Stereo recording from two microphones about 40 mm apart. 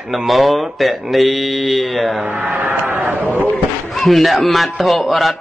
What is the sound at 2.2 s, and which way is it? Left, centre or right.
Speech, right.